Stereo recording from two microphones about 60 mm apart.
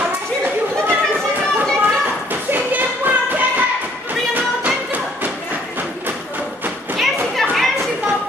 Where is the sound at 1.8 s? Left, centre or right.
Right.